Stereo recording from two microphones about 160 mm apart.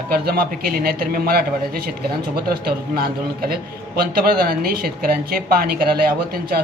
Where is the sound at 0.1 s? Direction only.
65° right (ahead or behind).